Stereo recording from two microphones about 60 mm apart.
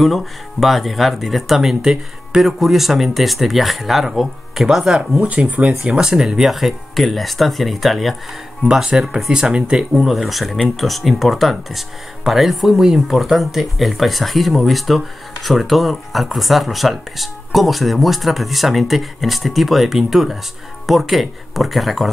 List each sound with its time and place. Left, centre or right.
0.0 s speech: centre
5.2 s speech: right; by 8.2 s centre
8.6 s speech: centre
9.9 s speech: centre